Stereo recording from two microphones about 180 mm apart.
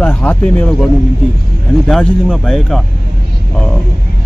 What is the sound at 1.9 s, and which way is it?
Speech, centre (ahead or behind).